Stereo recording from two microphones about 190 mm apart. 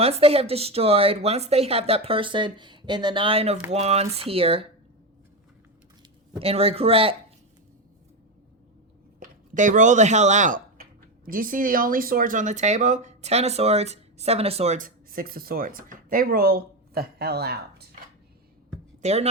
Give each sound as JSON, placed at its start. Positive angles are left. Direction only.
{"t": 0.0, "sound": "speech", "side_deg": -30}
{"t": 6.4, "sound": "speech", "side_deg": -30}
{"t": 9.2, "sound": "speech", "side_deg": -40}
{"t": 19.0, "sound": "speech", "side_deg": -35}